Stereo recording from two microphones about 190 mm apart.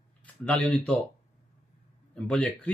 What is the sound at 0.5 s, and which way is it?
Speech, 10° left (ahead or behind).